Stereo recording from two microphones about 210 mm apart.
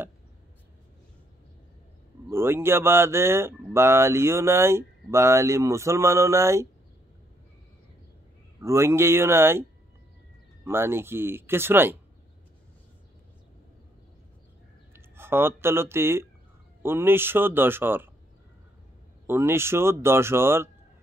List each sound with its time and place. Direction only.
2.2 s speech: 10° right (ahead or behind)
8.5 s speech: 15° right (ahead or behind)
14.9 s speech: 10° right (ahead or behind)
19.2 s speech: 10° right (ahead or behind)